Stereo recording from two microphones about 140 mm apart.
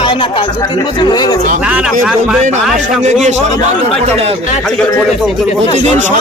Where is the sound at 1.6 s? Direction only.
10° right (ahead or behind).